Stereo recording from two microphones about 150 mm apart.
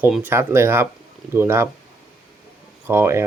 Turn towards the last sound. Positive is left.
turn(degrees=-15)  # may be behind; listen again after turning